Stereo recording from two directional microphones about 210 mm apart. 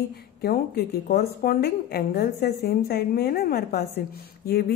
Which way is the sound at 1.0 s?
45° left (ahead or behind).